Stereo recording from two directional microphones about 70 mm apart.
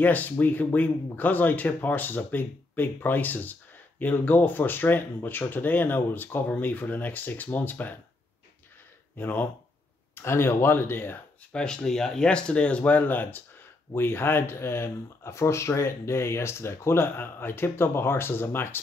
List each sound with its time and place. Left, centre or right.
0.0 s speech: left
9.1 s speech: left
10.1 s speech: left
11.5 s speech: centre; by 18.8 s left